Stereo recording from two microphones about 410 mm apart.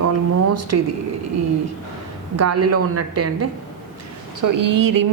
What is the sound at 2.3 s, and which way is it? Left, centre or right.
A woman's voice, right.